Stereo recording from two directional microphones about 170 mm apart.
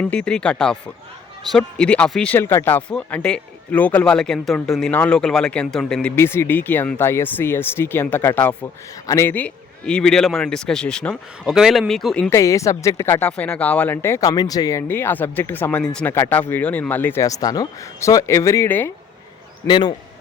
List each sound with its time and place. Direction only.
0.0 s speech: 5° left (ahead or behind)
12.3 s speech: 20° left (ahead or behind)
19.6 s a man's voice: 30° left (ahead or behind)